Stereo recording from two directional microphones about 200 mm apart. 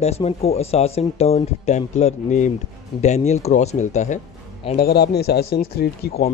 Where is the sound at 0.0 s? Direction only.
30° left (ahead or behind).